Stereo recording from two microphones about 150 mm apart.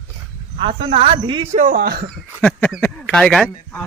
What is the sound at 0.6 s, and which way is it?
Speech, 35° right (ahead or behind).